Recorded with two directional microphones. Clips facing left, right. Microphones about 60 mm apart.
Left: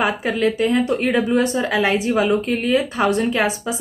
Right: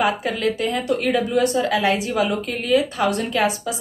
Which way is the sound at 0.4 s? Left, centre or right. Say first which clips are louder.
Left 4 dB; left.